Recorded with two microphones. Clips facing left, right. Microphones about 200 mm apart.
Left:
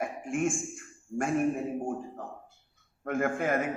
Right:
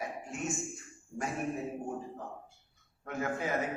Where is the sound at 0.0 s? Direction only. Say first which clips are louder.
Left 8 dB; 50° left (ahead or behind).